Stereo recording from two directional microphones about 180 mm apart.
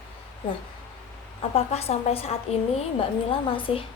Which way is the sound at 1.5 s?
35° left (ahead or behind).